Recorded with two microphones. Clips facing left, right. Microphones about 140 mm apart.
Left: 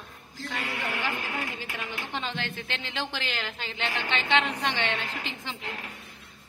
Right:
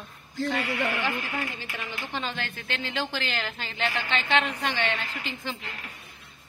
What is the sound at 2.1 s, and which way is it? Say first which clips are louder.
A woman's voice: right 1 dB; 20° left (ahead or behind).